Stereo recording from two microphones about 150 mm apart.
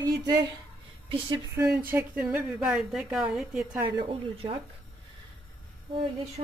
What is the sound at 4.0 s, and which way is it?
Speech, 35° right (ahead or behind).